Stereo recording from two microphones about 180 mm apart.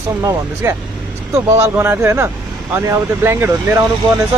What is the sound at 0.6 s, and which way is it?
Speech, 15° right (ahead or behind).